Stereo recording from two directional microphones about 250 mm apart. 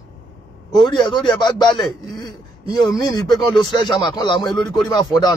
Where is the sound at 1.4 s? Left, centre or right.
Centre.